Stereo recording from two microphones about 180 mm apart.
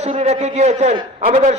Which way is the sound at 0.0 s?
35° right (ahead or behind).